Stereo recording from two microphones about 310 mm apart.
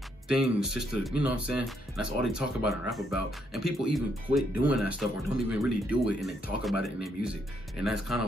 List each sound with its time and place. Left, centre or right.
0.3 s speech: centre